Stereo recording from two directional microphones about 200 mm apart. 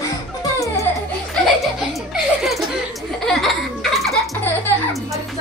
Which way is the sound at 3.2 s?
Centre (ahead or behind).